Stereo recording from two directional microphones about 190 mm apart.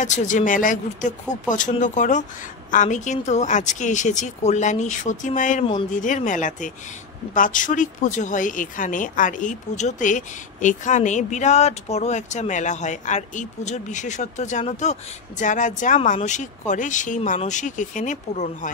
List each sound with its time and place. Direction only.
0.0 s speech: 40° left (ahead or behind)